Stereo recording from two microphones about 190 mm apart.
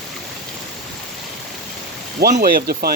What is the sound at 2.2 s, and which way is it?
Speech, 55° right (ahead or behind).